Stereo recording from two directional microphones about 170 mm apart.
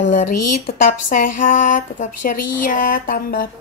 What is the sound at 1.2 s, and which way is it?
Speech, 50° left (ahead or behind).